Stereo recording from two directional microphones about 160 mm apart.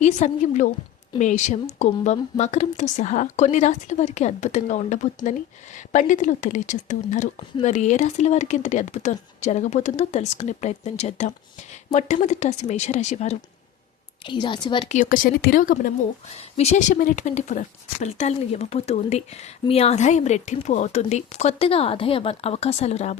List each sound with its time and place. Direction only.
0.0 s speech: 50° left (ahead or behind)
14.3 s speech: 30° left (ahead or behind)
14.8 s speech: 55° left (ahead or behind)
16.6 s speech: 45° left (ahead or behind)